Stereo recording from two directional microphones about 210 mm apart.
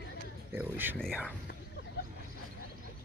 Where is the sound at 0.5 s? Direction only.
10° right (ahead or behind).